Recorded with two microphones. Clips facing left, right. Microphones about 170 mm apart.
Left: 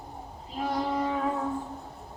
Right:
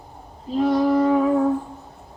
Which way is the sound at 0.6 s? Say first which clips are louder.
Right 11 dB; 85° right.